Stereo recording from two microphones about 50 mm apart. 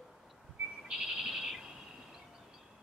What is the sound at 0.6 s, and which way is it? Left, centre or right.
Owl, centre.